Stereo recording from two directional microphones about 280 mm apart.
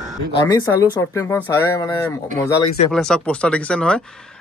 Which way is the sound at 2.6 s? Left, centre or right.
Left.